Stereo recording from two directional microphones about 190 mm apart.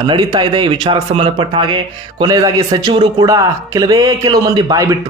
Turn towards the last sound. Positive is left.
turn(degrees=-20)  # may be behind; listen again after turning